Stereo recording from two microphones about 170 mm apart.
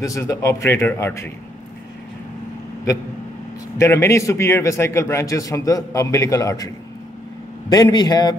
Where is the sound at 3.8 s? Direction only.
15° left (ahead or behind).